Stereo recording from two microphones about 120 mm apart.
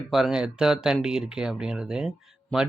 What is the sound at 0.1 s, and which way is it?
Speech, 5° right (ahead or behind).